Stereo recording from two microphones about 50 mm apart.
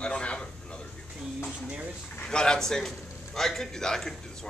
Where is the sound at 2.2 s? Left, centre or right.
Centre.